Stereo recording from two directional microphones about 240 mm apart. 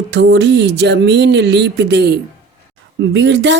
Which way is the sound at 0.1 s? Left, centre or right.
Right.